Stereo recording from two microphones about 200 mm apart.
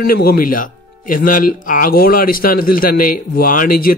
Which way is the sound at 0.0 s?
50° left (ahead or behind).